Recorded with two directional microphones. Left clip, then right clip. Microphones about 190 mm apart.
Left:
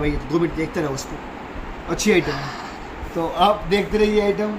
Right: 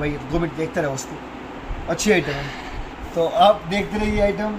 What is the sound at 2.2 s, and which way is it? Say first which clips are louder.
Speech: left 1 dB; 10° left (ahead or behind).